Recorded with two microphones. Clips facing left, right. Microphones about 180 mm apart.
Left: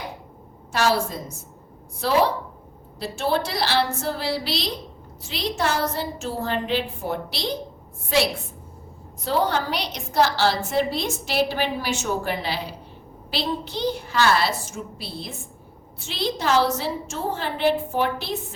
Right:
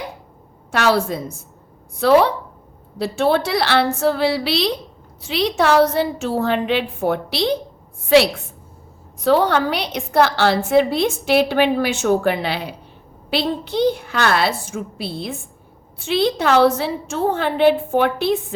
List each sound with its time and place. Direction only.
0.7 s a woman's voice: 65° right (ahead or behind)